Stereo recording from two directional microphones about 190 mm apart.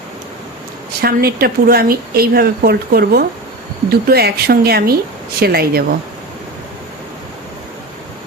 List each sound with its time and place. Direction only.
1.0 s speech: 55° right (ahead or behind)